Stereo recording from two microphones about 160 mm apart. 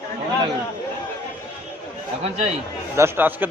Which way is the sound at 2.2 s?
45° right (ahead or behind).